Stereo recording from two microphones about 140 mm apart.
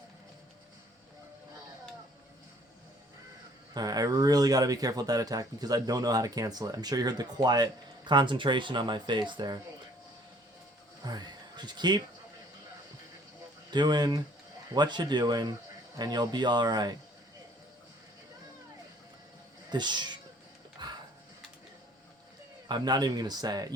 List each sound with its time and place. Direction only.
3.8 s speech: 30° right (ahead or behind)
11.0 s speech: 30° right (ahead or behind)
13.7 s speech: 30° right (ahead or behind)
19.7 s speech: 30° right (ahead or behind)
20.8 s music: 35° right (ahead or behind)
22.7 s speech: 30° right (ahead or behind)